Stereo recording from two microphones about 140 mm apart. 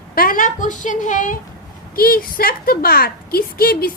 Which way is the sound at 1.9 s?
90° left.